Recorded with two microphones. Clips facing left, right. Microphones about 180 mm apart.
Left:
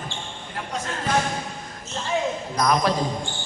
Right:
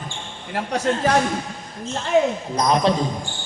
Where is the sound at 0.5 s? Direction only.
75° right (ahead or behind).